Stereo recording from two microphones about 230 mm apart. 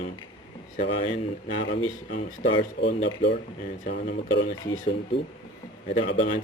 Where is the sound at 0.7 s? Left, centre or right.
Left.